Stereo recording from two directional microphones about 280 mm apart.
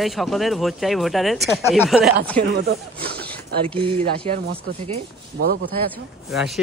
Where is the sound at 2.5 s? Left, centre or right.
Right.